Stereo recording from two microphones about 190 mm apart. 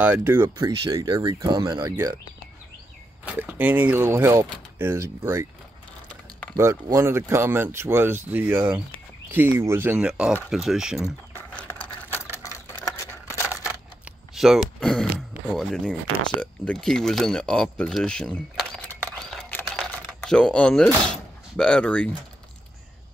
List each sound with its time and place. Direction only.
0.0 s speech: 10° right (ahead or behind)
3.3 s speech: 10° right (ahead or behind)
6.5 s speech: 15° right (ahead or behind)
11.3 s a sound: 10° left (ahead or behind)
14.0 s speech: centre (ahead or behind)
19.3 s typing: 5° left (ahead or behind)
21.5 s speech: 5° left (ahead or behind)